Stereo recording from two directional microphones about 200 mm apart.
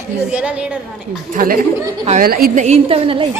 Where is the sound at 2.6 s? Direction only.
30° right (ahead or behind).